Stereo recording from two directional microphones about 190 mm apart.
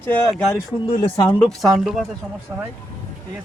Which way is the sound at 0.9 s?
30° left (ahead or behind).